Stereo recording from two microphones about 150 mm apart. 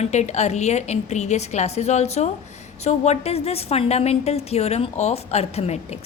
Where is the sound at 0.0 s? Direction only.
50° left (ahead or behind).